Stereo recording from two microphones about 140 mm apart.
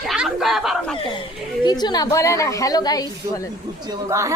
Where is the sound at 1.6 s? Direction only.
30° left (ahead or behind).